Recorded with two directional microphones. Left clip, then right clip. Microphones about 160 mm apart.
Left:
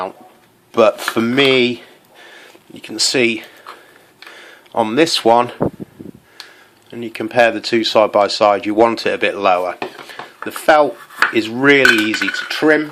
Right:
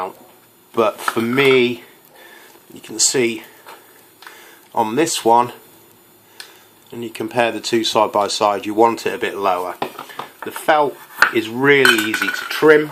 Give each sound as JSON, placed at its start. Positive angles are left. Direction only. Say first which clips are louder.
{"t": 0.7, "sound": "cutlery", "louder": "left 5 dB", "side_deg": 50}
{"t": 2.8, "sound": "cutlery", "louder": "left 3 dB", "side_deg": 40}
{"t": 4.4, "sound": "speech", "louder": "left 1 dB", "side_deg": 40}
{"t": 6.9, "sound": "speech", "louder": "left 4 dB", "side_deg": 30}
{"t": 11.3, "sound": "cutlery", "louder": "left 5 dB", "side_deg": 45}